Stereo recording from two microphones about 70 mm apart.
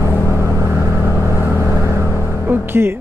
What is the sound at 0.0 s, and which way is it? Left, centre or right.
Vehicle, left.